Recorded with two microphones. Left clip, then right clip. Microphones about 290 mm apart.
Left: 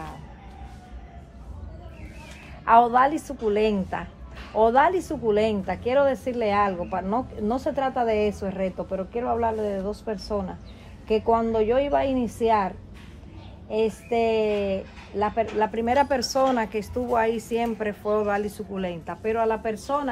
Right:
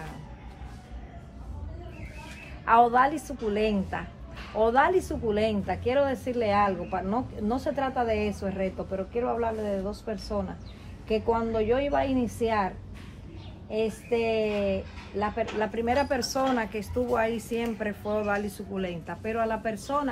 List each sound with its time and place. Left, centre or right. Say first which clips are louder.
2.6 s a woman's voice: left 3 dB; left